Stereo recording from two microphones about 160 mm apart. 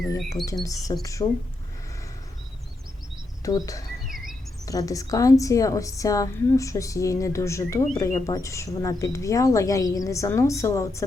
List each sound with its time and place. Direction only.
0.6 s a woman's voice: 20° left (ahead or behind)
3.4 s a woman's voice: 20° left (ahead or behind)